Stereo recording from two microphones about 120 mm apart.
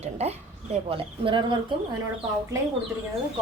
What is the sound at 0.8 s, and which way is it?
Speech, 45° right (ahead or behind).